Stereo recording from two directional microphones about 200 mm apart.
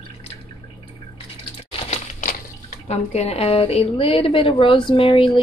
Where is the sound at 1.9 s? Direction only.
40° left (ahead or behind).